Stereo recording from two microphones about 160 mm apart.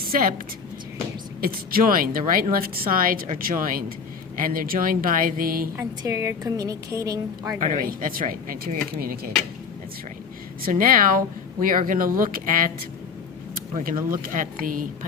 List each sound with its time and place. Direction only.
0.0 s a woman's voice: 60° right (ahead or behind)
1.4 s a woman's voice: 65° right (ahead or behind)
6.0 s a woman's voice: 20° right (ahead or behind)
7.6 s a woman's voice: 60° right (ahead or behind)
10.6 s a woman's voice: 60° right (ahead or behind)
13.7 s a woman's voice: 60° right (ahead or behind)